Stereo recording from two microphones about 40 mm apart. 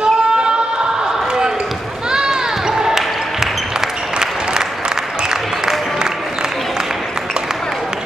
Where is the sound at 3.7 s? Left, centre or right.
Centre.